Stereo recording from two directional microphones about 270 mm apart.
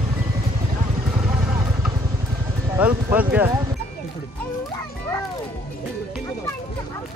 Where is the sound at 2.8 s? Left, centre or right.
Centre.